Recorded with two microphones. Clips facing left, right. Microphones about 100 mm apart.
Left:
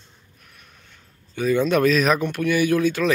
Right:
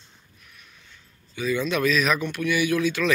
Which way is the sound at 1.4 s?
50° left (ahead or behind).